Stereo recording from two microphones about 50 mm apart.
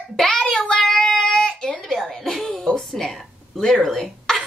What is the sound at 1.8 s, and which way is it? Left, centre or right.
Music, centre.